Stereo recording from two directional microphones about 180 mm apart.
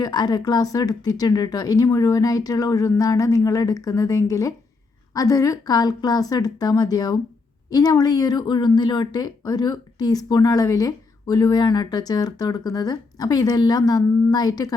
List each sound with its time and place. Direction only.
0.0 s a woman's voice: 25° left (ahead or behind)